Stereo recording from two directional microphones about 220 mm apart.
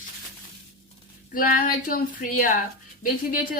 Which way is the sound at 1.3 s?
40° left (ahead or behind).